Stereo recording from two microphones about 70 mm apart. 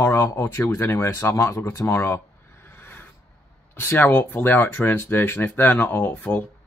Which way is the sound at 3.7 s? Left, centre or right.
Left.